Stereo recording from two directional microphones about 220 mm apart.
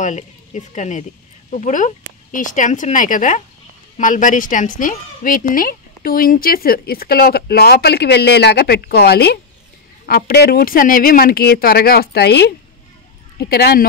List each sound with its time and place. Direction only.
0.0 s a woman's voice: 35° left (ahead or behind)